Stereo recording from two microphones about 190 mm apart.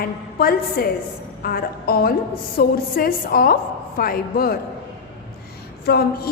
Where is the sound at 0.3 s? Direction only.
50° left (ahead or behind).